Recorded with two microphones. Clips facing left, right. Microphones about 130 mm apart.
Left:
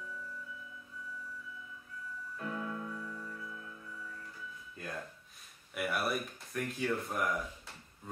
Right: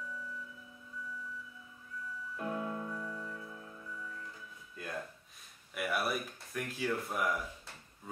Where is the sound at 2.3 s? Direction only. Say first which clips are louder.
Right 2 dB; 25° right (ahead or behind).